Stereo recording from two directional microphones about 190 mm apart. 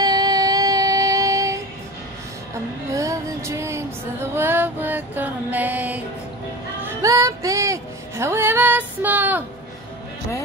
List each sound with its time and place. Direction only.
0.0 s music: 20° right (ahead or behind)
2.9 s music: 15° right (ahead or behind)